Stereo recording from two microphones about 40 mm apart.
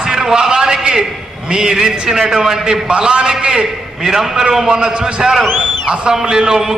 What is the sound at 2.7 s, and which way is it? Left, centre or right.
A man's voice, right.